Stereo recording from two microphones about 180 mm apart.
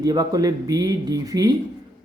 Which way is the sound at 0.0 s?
20° right (ahead or behind).